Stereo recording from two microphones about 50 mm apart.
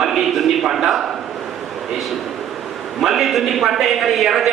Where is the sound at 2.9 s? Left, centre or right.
Centre.